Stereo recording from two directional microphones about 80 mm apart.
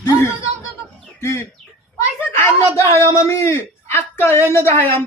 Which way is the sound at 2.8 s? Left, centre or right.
Left.